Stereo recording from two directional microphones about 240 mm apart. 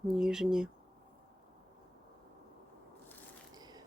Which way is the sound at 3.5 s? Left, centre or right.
Centre.